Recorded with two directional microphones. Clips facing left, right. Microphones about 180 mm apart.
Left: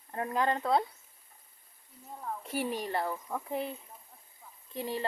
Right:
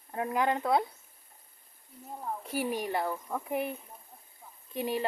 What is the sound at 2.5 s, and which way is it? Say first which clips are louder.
Speech: right 1 dB; 10° right (ahead or behind).